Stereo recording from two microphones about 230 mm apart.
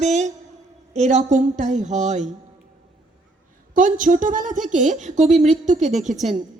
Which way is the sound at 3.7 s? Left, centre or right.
Right.